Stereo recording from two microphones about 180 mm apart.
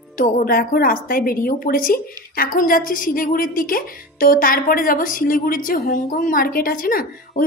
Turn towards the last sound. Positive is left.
turn(degrees=50)  # may be behind; listen again after turning